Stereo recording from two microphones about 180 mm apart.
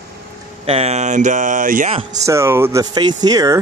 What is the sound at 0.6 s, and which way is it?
Speech, 35° right (ahead or behind).